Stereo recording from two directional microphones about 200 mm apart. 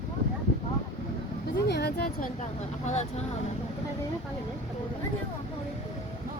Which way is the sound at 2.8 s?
35° left (ahead or behind).